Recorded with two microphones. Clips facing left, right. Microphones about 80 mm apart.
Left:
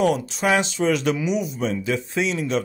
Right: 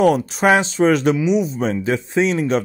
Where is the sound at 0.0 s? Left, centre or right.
Right.